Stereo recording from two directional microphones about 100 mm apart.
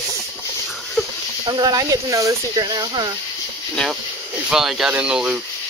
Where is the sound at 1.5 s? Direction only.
40° right (ahead or behind).